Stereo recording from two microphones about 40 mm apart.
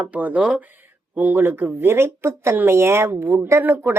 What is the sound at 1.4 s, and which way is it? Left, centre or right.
Speech, right.